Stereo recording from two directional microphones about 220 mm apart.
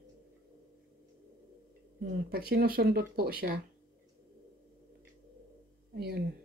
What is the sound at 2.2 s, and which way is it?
Speech, 45° right (ahead or behind).